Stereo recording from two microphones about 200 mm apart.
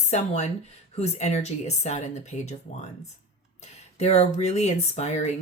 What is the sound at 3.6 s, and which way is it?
Speech, 30° left (ahead or behind).